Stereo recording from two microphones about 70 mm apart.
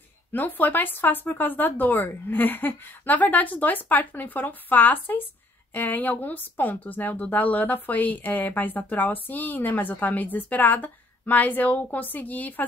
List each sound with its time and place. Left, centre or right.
0.3 s speech: left